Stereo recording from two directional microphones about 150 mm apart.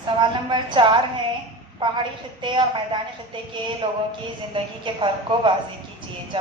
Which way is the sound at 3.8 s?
35° right (ahead or behind).